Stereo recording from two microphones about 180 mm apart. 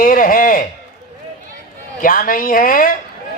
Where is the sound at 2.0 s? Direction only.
50° left (ahead or behind).